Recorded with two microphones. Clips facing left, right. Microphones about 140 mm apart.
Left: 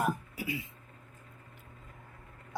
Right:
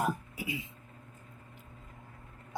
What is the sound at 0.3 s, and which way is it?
Throat clearing, 20° right (ahead or behind).